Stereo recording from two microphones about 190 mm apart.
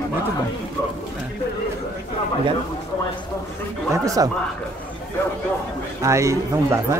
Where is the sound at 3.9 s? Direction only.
15° right (ahead or behind).